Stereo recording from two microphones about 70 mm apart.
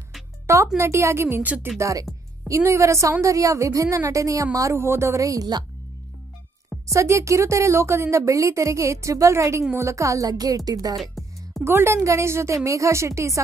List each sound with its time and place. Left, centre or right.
0.7 s a woman's voice: right
1.4 s speech: right
1.8 s a woman's voice: right
6.9 s a woman's voice: right
9.8 s music: right
11.0 s music: centre
11.6 s a woman's voice: right